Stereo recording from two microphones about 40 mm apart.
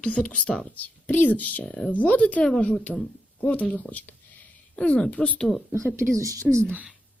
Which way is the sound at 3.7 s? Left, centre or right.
Left.